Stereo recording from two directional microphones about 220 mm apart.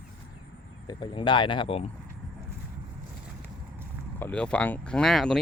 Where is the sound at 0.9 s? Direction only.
20° left (ahead or behind).